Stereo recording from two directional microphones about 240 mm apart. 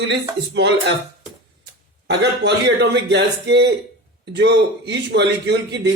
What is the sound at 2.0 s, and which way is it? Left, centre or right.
A man's voice, right.